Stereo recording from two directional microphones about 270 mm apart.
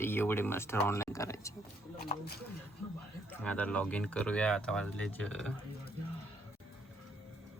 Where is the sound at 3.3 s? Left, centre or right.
Centre.